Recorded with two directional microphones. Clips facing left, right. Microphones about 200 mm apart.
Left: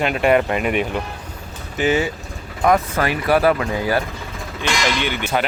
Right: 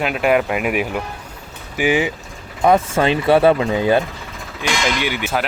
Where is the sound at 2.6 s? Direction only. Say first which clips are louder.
Right 3 dB; 25° right (ahead or behind).